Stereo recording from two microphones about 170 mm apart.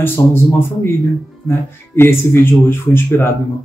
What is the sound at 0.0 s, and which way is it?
Speech, 15° left (ahead or behind).